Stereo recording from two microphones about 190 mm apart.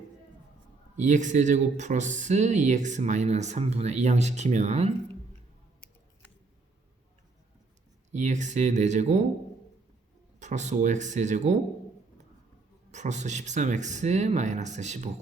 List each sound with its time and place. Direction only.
0.9 s speech: 40° right (ahead or behind)
8.1 s speech: 40° right (ahead or behind)
10.4 s speech: 40° right (ahead or behind)
12.9 s speech: 40° right (ahead or behind)